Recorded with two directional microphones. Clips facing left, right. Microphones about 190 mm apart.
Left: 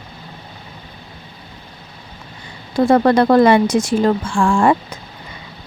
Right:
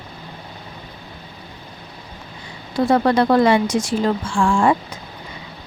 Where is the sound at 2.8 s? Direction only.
50° left (ahead or behind).